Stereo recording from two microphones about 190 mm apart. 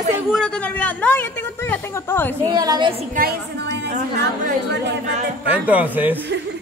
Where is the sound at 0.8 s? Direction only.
10° left (ahead or behind).